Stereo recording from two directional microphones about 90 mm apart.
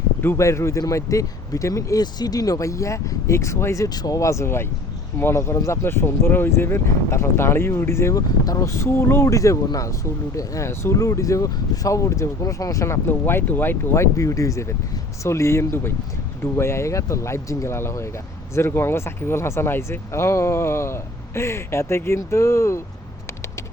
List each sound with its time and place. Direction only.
0.2 s speech: 30° left (ahead or behind)
3.8 s speech: 45° left (ahead or behind)